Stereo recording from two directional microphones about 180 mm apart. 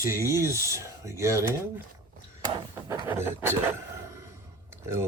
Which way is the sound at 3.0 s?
15° right (ahead or behind).